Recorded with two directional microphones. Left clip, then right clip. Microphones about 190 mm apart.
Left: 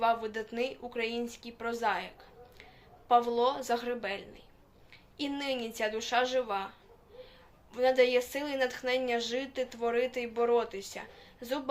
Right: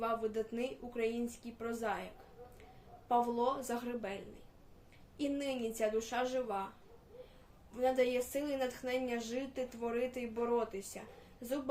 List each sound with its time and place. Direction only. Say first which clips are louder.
0.0 s speech: left 6 dB; 10° right (ahead or behind)
3.1 s speech: left 6 dB; 10° right (ahead or behind)
7.7 s speech: left 7 dB; 10° right (ahead or behind)